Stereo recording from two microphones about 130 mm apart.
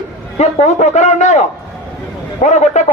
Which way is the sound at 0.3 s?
65° left (ahead or behind).